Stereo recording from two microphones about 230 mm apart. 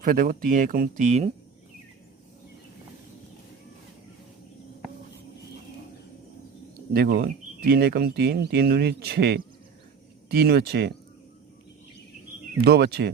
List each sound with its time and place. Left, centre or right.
0.0 s speech: right
6.9 s speech: right
12.6 s speech: right